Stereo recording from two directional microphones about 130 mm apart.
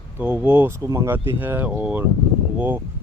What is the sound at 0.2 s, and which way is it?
Speech, 10° right (ahead or behind).